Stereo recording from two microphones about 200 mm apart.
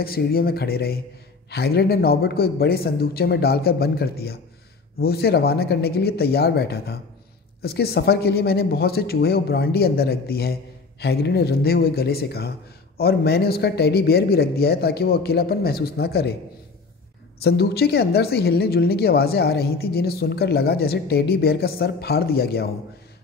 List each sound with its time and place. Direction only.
0.0 s speech: 50° left (ahead or behind)
17.4 s speech: 55° left (ahead or behind)